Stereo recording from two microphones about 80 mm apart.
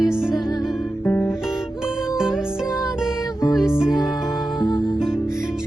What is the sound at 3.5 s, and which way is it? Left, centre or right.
Music, centre.